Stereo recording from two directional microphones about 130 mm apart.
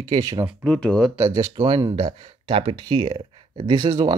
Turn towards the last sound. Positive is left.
turn(degrees=-35)  # may be behind; listen again after turning